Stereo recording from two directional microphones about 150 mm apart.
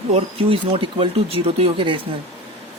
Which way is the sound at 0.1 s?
40° right (ahead or behind).